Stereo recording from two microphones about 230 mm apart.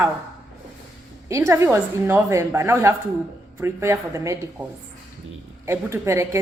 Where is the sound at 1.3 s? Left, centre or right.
Centre.